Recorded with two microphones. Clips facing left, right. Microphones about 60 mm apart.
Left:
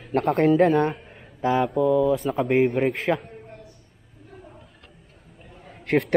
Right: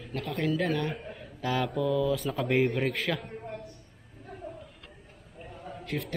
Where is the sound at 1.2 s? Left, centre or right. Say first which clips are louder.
Left 9 dB; left.